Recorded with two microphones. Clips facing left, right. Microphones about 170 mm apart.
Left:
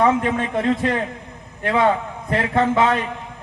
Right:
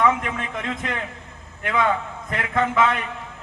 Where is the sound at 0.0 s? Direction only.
35° left (ahead or behind).